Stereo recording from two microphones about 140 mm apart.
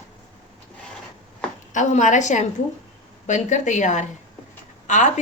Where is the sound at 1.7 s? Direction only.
60° left (ahead or behind).